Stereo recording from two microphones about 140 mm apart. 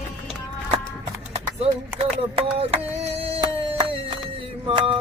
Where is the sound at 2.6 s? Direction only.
45° right (ahead or behind).